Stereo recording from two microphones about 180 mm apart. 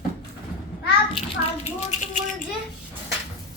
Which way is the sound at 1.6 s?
40° left (ahead or behind).